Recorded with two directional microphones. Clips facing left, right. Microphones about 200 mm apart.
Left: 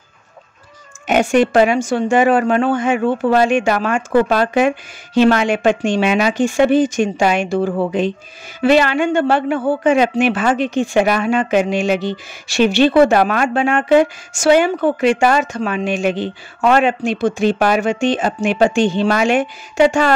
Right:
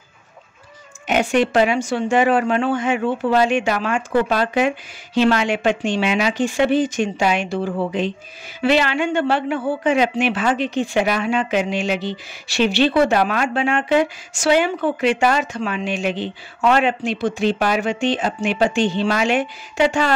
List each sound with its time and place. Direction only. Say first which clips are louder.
1.0 s speech: left 4 dB; 45° left (ahead or behind)